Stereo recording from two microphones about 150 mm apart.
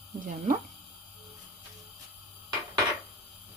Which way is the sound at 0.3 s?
60° right (ahead or behind).